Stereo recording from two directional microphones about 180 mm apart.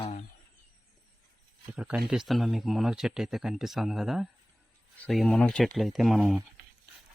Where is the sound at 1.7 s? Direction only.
5° right (ahead or behind).